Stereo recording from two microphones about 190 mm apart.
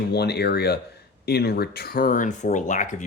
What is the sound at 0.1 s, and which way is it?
Speech, 60° left (ahead or behind).